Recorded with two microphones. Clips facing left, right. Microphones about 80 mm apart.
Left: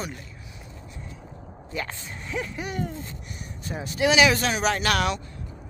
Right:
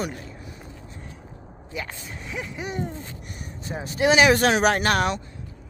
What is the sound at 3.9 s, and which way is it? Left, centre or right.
Speech, right.